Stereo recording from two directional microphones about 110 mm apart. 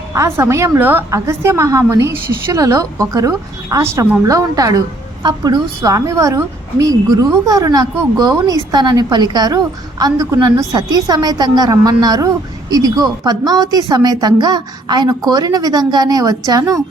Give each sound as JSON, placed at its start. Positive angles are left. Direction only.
{"t": 0.1, "sound": "a woman's voice", "side_deg": -25}